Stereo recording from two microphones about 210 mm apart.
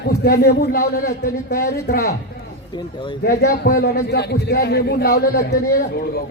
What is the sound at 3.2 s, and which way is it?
Speech, 50° left (ahead or behind).